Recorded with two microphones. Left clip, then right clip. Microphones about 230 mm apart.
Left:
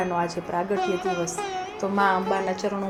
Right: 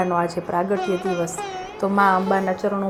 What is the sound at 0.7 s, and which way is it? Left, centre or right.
Music, centre.